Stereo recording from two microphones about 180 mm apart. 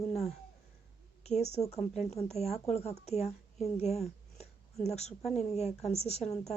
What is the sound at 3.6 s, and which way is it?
Speech, 35° left (ahead or behind).